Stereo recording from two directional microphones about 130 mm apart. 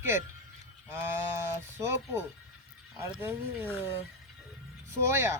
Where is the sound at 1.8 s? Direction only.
20° right (ahead or behind).